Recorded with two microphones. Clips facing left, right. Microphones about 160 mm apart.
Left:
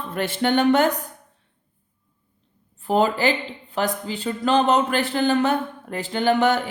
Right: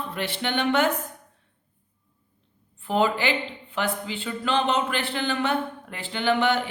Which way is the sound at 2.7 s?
40° left (ahead or behind).